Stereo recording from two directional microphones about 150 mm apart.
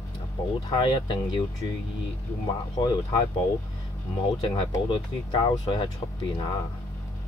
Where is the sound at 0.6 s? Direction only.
30° left (ahead or behind).